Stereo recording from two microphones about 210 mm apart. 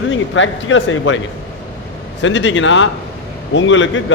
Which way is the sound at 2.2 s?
60° left (ahead or behind).